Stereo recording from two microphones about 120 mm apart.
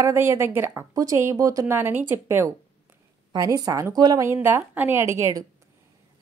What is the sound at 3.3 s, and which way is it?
Speech, 30° right (ahead or behind).